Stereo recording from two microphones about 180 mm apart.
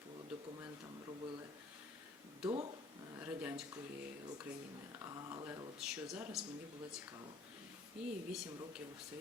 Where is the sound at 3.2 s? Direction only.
10° right (ahead or behind).